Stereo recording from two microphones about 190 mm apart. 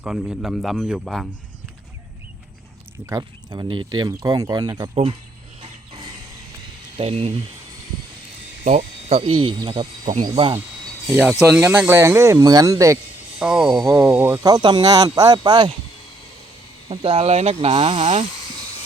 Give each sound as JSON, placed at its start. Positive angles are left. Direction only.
{"t": 0.0, "sound": "speech", "side_deg": -5}
{"t": 3.1, "sound": "speech", "side_deg": -20}
{"t": 6.9, "sound": "speech", "side_deg": -30}
{"t": 8.6, "sound": "speech", "side_deg": -40}
{"t": 11.2, "sound": "speech", "side_deg": -5}
{"t": 13.4, "sound": "speech", "side_deg": 0}
{"t": 13.7, "sound": "speech", "side_deg": -15}
{"t": 16.9, "sound": "speech", "side_deg": -30}